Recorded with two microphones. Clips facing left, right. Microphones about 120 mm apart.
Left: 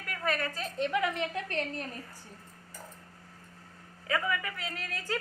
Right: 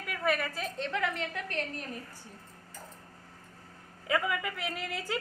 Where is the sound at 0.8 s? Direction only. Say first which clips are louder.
Left 4 dB; 15° left (ahead or behind).